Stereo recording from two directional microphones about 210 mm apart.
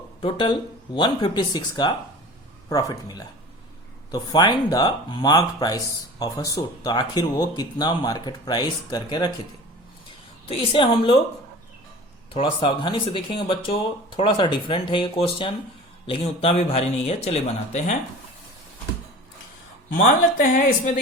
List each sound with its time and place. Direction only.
0.2 s speech: 25° left (ahead or behind)
10.5 s speech: 25° left (ahead or behind)
12.3 s speech: 25° left (ahead or behind)
20.4 s speech: 40° left (ahead or behind)